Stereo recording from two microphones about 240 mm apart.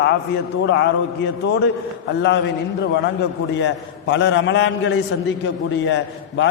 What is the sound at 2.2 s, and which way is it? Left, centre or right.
A man's voice, left.